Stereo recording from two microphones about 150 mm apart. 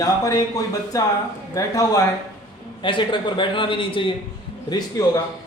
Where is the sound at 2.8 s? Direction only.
35° left (ahead or behind).